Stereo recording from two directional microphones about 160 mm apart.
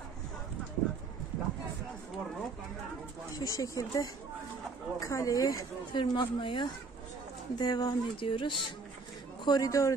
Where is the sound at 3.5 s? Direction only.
20° left (ahead or behind).